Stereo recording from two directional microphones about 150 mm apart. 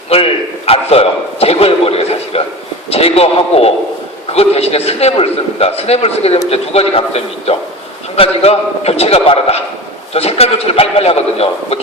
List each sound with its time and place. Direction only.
0.1 s a man's voice: 40° left (ahead or behind)